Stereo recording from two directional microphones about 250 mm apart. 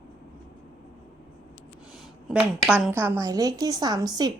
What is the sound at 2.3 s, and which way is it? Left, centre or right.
Speech, centre.